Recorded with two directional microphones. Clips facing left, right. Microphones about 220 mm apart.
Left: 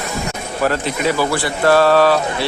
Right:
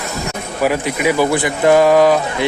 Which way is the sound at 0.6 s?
10° right (ahead or behind).